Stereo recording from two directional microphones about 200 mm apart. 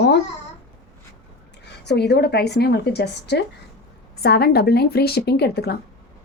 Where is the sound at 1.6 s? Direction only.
55° left (ahead or behind).